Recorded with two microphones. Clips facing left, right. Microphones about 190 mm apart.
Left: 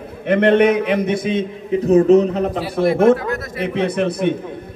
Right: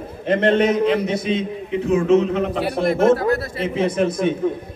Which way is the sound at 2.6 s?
55° right (ahead or behind).